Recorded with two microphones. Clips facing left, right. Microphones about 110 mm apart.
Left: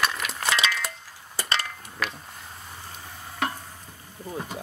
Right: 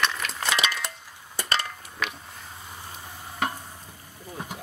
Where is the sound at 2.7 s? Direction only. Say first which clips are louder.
Right 1 dB; 10° right (ahead or behind).